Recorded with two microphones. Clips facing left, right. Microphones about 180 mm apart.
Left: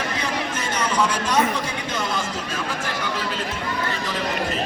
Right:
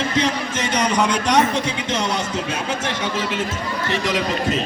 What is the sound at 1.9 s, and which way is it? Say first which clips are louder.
Speech: right 3 dB; 80° right.